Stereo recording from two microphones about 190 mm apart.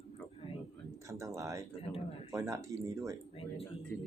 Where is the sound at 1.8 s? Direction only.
30° left (ahead or behind).